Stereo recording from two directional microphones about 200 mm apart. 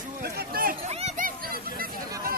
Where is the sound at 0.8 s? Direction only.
35° right (ahead or behind).